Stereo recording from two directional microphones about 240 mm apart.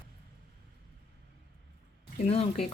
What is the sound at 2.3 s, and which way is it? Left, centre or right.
Speech, left.